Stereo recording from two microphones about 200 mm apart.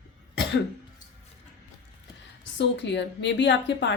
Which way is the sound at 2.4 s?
60° left (ahead or behind).